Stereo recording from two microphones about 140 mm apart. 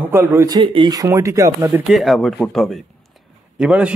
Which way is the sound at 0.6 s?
40° right (ahead or behind).